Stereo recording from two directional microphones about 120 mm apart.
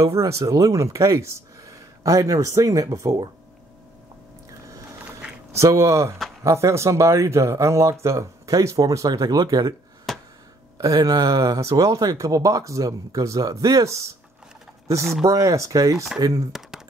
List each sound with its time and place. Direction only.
0.0 s speech: 25° right (ahead or behind)
4.5 s vehicle: 25° right (ahead or behind)
5.5 s speech: 25° right (ahead or behind)
10.1 s a sound: centre (ahead or behind)
10.8 s speech: 30° right (ahead or behind)
15.2 s speech: 25° right (ahead or behind)